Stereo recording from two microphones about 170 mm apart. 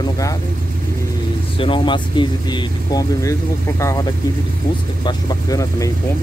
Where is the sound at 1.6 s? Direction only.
30° left (ahead or behind).